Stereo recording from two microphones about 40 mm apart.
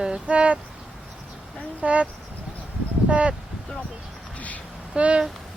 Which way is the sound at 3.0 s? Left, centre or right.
Right.